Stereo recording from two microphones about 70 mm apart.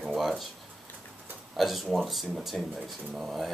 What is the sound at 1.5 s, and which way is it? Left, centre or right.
Speech, centre.